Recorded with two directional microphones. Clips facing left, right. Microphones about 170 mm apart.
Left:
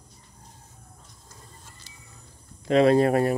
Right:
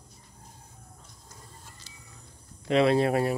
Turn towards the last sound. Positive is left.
turn(degrees=45)  # may be behind; listen again after turning